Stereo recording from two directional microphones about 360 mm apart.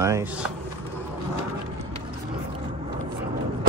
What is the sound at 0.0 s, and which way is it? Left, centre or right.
Speech, centre.